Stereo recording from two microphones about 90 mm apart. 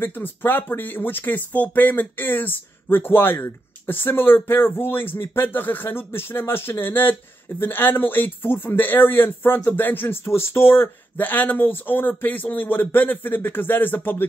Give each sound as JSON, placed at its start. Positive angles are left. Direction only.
{"t": 0.0, "sound": "speech", "side_deg": 25}